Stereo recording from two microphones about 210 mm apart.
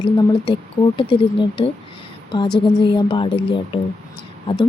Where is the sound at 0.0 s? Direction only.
20° left (ahead or behind).